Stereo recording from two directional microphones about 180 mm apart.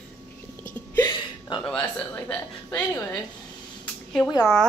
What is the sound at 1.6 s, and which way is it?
Speech, 5° left (ahead or behind).